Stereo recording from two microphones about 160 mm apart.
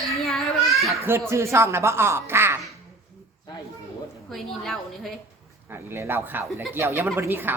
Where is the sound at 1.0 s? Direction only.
15° right (ahead or behind).